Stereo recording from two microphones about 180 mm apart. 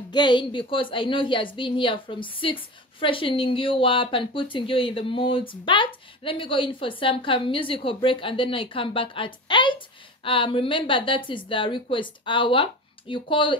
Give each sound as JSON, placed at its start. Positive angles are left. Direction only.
{"t": 0.1, "sound": "a woman's voice", "side_deg": 25}